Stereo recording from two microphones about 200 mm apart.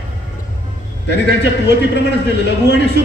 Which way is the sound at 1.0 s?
60° left (ahead or behind).